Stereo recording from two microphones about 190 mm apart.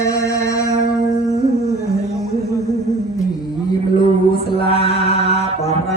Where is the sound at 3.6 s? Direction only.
25° left (ahead or behind).